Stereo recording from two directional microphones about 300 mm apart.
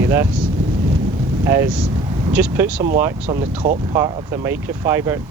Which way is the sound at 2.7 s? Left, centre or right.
Right.